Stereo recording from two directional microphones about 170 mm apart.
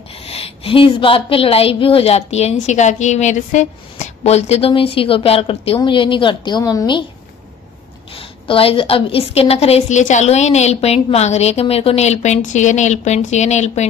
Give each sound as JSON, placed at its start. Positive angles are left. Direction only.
{"t": 0.1, "sound": "a woman's voice", "side_deg": 35}
{"t": 8.1, "sound": "a woman's voice", "side_deg": 30}